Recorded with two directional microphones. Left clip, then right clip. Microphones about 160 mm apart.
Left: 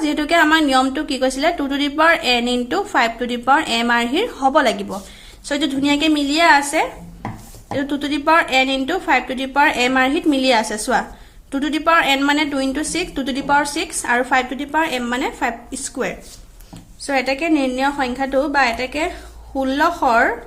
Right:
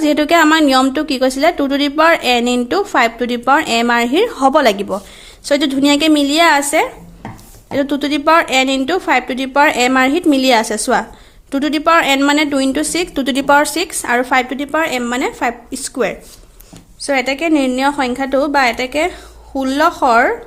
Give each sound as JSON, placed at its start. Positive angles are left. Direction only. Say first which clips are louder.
{"t": 0.0, "sound": "a woman's voice", "louder": "right 4 dB", "side_deg": -40}